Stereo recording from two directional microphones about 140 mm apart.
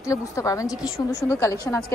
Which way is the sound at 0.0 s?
20° left (ahead or behind).